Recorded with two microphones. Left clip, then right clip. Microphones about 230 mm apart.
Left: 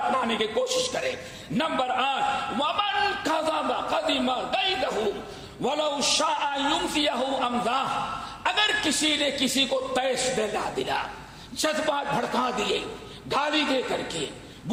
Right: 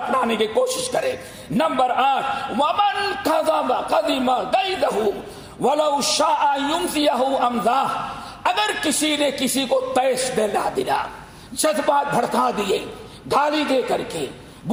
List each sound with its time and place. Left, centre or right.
0.1 s a man's voice: right